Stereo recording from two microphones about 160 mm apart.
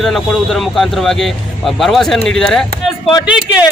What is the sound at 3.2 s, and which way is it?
Speech, 10° right (ahead or behind).